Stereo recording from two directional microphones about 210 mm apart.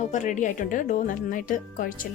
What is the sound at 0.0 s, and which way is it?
Speech, 35° left (ahead or behind).